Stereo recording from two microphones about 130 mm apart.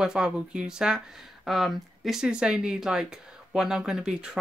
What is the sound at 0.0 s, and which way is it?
Speech, 5° right (ahead or behind).